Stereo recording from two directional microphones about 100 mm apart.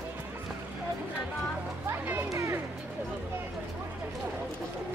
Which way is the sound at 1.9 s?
25° right (ahead or behind).